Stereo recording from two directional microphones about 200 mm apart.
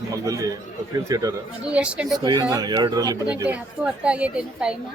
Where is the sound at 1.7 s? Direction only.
5° right (ahead or behind).